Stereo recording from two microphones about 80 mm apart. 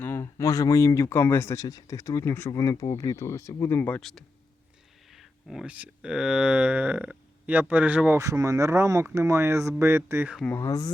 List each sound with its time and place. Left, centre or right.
0.0 s speech: left
1.1 s speech: left
1.6 s speech: left
4.1 s speech: centre
5.1 s a sound: centre
5.6 s speech: centre
8.2 s speech: right
10.4 s speech: left